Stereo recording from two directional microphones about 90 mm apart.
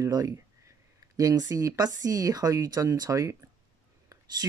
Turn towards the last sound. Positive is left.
turn(degrees=-40)  # may be behind; listen again after turning